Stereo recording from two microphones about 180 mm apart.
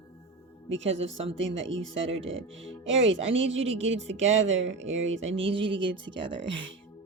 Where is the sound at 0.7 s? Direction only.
90° right.